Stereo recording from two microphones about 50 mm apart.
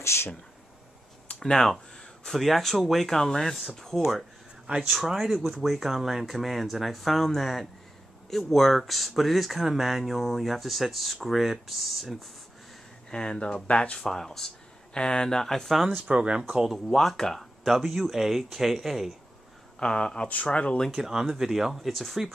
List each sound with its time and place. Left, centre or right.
0.0 s speech: left
1.4 s speech: centre
13.1 s speech: centre
13.9 s speech: centre
16.1 s speech: right
16.8 s speech: centre
19.8 s speech: centre
20.9 s speech: centre